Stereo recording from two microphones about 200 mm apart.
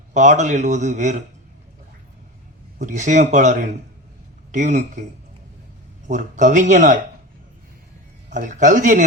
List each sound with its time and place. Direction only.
0.1 s speech: 35° right (ahead or behind)
2.7 s speech: 40° right (ahead or behind)
6.1 s speech: 40° right (ahead or behind)
8.3 s speech: 40° right (ahead or behind)